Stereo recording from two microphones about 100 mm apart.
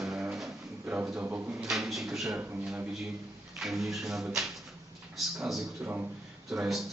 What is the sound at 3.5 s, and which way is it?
A man's voice, centre (ahead or behind).